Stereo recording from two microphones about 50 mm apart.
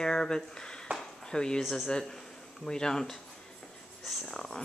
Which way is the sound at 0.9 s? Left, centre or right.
Centre.